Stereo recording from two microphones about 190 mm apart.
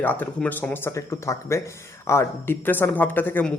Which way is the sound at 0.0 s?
10° left (ahead or behind).